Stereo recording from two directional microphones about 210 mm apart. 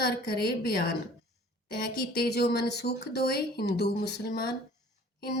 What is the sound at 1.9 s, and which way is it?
A woman's voice, 45° left (ahead or behind).